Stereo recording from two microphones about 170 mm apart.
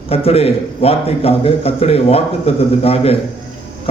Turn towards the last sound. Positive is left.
turn(degrees=35)  # may be behind; listen again after turning